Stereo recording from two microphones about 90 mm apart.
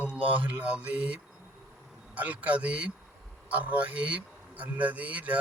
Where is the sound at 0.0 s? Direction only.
20° right (ahead or behind).